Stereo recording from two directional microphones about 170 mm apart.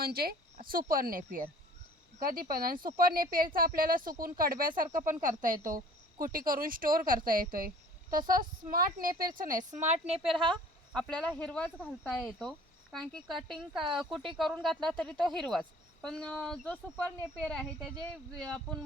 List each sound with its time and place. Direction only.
0.0 s a woman's voice: 65° right (ahead or behind); by 10.2 s 45° right (ahead or behind)
10.5 s a woman's voice: 5° left (ahead or behind)